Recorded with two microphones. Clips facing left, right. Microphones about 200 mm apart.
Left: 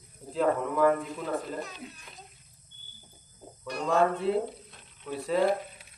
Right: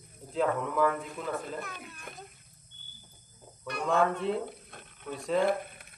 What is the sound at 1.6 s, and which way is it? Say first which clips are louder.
Speech: left 2 dB; 55° right (ahead or behind).